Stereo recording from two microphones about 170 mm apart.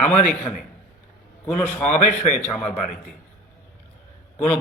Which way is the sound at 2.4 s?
10° left (ahead or behind).